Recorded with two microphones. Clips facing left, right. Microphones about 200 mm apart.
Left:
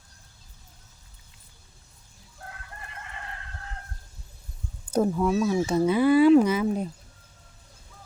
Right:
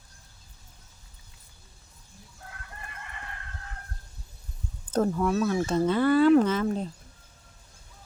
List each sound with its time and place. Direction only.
4.9 s speech: 10° left (ahead or behind)